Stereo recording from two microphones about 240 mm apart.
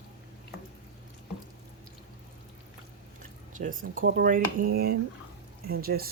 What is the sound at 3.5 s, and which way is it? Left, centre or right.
Speech, right.